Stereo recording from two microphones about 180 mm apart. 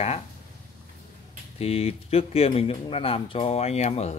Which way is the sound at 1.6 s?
35° left (ahead or behind).